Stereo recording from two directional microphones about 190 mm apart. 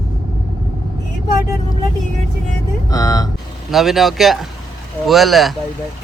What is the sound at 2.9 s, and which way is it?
Speech, 20° left (ahead or behind).